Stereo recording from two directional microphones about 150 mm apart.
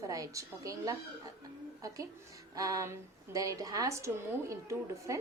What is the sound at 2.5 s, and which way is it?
A woman's voice, 20° right (ahead or behind).